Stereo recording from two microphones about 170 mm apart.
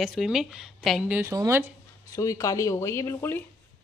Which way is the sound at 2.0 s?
20° left (ahead or behind).